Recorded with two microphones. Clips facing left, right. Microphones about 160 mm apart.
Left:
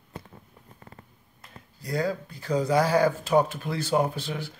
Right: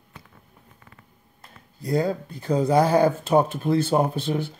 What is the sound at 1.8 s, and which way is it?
Speech, 25° right (ahead or behind).